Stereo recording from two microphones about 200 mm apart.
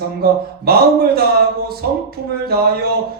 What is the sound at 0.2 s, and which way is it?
Speech, 50° right (ahead or behind).